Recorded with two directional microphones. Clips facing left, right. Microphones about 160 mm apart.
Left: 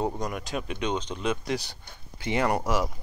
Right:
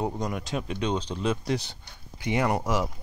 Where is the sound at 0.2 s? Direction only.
25° right (ahead or behind).